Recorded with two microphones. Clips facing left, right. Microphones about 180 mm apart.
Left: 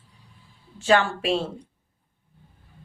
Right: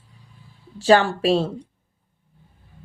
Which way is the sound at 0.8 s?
35° right (ahead or behind).